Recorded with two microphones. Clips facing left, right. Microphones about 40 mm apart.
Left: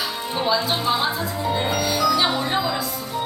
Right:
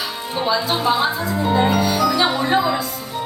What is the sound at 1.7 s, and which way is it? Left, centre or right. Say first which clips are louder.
Music: right 3 dB; centre.